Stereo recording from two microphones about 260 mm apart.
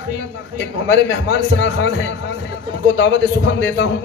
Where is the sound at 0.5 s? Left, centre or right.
Left.